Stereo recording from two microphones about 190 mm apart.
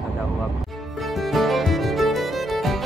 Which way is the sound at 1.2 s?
Centre (ahead or behind).